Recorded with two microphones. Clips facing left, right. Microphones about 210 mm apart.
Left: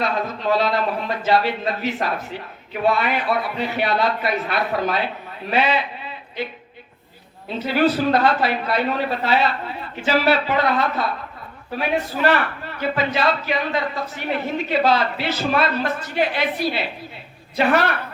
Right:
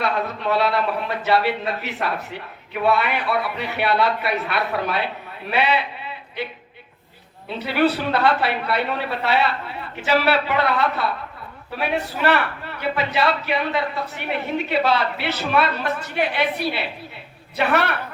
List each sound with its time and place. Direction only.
0.0 s a man's voice: 65° right (ahead or behind)
7.6 s a man's voice: 65° right (ahead or behind)